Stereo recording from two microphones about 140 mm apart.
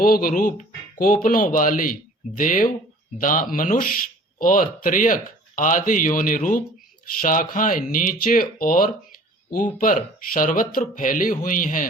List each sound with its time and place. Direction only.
0.0 s speech: 90° left; by 11.9 s 70° left (ahead or behind)